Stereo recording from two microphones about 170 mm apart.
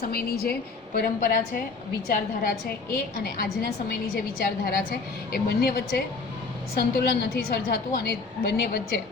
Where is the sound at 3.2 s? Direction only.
65° left (ahead or behind).